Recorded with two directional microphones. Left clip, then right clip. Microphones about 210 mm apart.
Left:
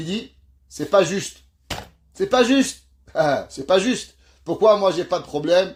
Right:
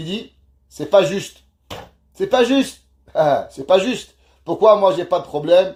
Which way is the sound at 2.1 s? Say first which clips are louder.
Right 2 dB; 40° left (ahead or behind).